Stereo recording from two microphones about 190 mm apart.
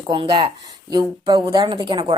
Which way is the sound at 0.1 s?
25° right (ahead or behind).